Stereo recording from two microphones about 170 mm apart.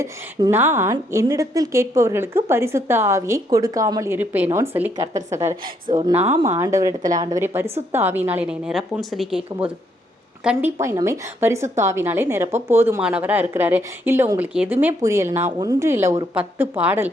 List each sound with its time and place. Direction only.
0.0 s a woman's voice: 20° right (ahead or behind)